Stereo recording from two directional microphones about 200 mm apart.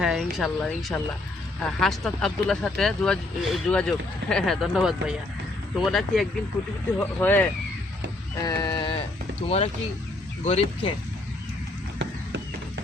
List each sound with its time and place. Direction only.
0.0 s speech: 5° right (ahead or behind)
8.4 s speech: 20° left (ahead or behind)